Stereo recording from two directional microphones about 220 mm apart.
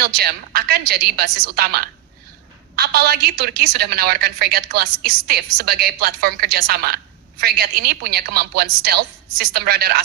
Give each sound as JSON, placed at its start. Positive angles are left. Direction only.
{"t": 0.0, "sound": "a woman's voice", "side_deg": -45}